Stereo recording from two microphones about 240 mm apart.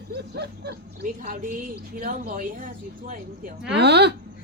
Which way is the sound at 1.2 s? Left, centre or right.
Right.